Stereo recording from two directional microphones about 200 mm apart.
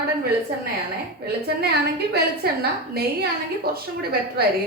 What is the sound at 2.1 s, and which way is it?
A woman's voice, 50° right (ahead or behind).